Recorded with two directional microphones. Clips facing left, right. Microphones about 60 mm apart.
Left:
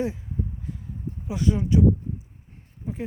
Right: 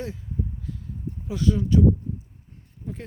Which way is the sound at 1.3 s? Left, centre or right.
Left.